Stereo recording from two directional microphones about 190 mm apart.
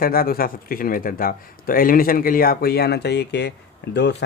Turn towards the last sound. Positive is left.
turn(degrees=60)  # may be behind; listen again after turning